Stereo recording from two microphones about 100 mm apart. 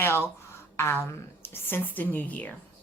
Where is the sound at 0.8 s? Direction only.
25° left (ahead or behind).